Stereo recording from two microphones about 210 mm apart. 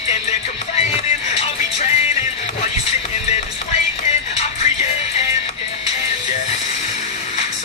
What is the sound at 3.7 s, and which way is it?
Music, 30° left (ahead or behind).